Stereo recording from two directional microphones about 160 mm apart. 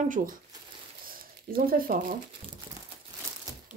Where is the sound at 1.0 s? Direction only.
65° right (ahead or behind).